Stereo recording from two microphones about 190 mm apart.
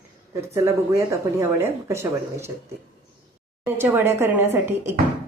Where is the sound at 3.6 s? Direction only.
10° right (ahead or behind).